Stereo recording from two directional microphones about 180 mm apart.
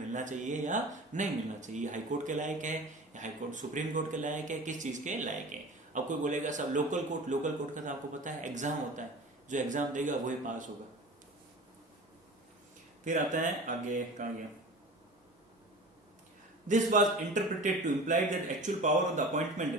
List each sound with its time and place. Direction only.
0.1 s speech: 45° right (ahead or behind)
13.1 s speech: 45° right (ahead or behind)
16.6 s speech: 45° right (ahead or behind)